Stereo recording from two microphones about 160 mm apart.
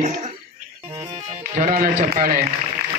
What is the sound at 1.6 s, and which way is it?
Speech, 60° right (ahead or behind).